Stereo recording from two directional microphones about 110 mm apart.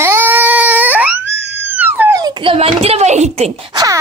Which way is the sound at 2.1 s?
35° right (ahead or behind).